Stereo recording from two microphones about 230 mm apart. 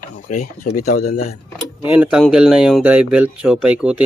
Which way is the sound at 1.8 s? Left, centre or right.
Centre.